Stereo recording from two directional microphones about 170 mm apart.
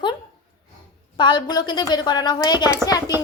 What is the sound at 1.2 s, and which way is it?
A woman's voice, 25° left (ahead or behind).